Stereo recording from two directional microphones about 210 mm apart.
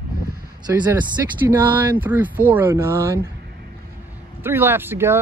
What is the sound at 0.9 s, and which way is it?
Speech, 10° right (ahead or behind).